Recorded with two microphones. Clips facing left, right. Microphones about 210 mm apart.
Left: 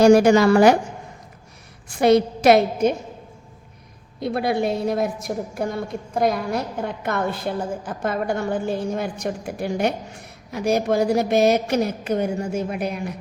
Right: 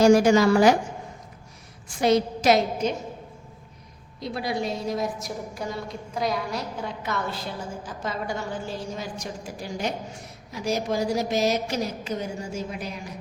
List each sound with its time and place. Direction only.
0.0 s a woman's voice: 60° left (ahead or behind)
1.9 s a woman's voice: 60° left (ahead or behind)
4.2 s a woman's voice: 60° left (ahead or behind)